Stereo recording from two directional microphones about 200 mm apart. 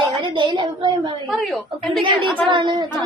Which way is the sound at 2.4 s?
25° right (ahead or behind).